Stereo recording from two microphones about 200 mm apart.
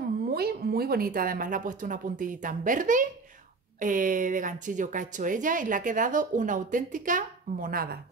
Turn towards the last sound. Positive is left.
turn(degrees=-45)  # may be behind; listen again after turning